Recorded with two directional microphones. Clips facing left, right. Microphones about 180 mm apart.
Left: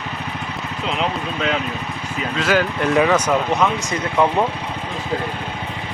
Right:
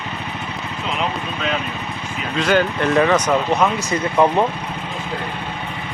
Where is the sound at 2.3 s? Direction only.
Centre (ahead or behind).